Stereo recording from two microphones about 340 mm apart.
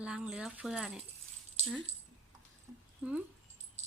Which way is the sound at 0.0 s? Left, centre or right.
Centre.